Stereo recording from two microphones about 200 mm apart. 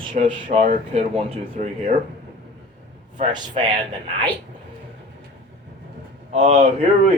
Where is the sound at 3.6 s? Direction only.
30° right (ahead or behind).